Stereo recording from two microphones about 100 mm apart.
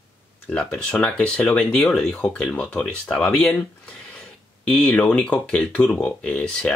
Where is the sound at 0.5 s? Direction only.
10° left (ahead or behind).